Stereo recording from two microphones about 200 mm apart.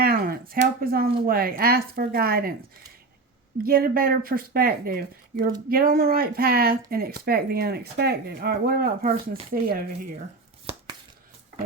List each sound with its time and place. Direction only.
0.0 s a sound: 50° right (ahead or behind)
1.2 s speech: 45° right (ahead or behind)
3.6 s speech: 50° right (ahead or behind)
10.7 s tearing: 30° right (ahead or behind)